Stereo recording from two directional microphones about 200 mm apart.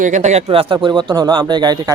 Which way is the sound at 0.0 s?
35° right (ahead or behind).